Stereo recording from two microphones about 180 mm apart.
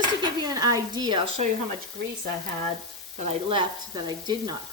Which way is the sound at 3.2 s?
35° right (ahead or behind).